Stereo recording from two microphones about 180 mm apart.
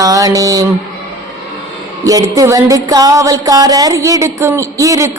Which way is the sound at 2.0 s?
20° right (ahead or behind).